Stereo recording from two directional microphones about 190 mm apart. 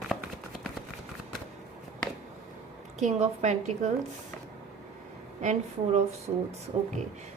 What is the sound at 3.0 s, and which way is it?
Speech, 35° right (ahead or behind).